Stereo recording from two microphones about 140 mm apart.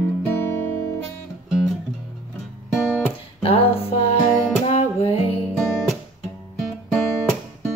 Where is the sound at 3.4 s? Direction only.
45° left (ahead or behind).